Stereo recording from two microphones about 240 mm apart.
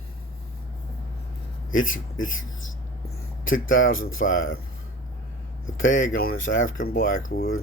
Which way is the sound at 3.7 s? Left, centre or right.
Left.